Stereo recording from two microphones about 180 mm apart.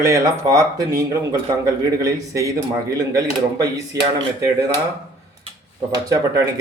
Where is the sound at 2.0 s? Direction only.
20° right (ahead or behind).